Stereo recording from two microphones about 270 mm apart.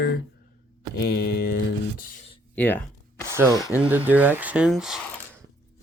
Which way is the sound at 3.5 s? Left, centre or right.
Centre.